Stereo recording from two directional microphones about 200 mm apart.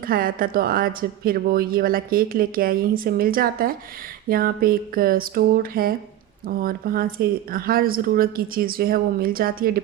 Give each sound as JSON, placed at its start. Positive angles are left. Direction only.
{"t": 0.1, "sound": "speech", "side_deg": -45}